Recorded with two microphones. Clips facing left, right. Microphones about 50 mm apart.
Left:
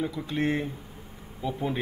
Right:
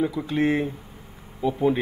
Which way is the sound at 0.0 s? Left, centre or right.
Centre.